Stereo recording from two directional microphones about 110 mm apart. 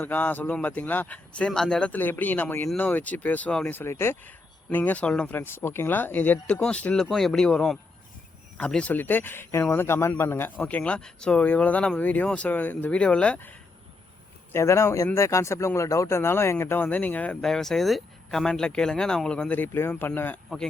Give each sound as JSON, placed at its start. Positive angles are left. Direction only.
{"t": 0.0, "sound": "speech", "side_deg": 15}
{"t": 3.8, "sound": "speech", "side_deg": 20}
{"t": 14.5, "sound": "speech", "side_deg": 25}
{"t": 17.4, "sound": "speech", "side_deg": 5}